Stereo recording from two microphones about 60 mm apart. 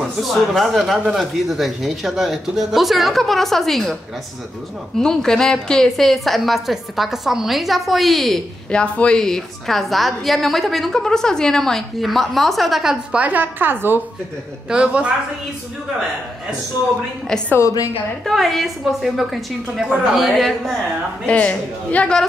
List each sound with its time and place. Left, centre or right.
0.0 s a woman's voice: centre
4.9 s a woman's voice: centre
8.6 s speech: centre
9.2 s a woman's voice: centre
13.1 s speech: right
14.7 s speech: centre
17.6 s a woman's voice: left
18.2 s a woman's voice: centre
21.3 s a woman's voice: left